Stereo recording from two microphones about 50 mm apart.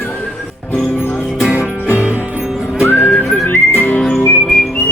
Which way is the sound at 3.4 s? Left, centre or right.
Left.